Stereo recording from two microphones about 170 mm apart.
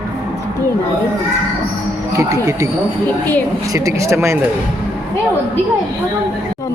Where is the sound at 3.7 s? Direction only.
20° right (ahead or behind).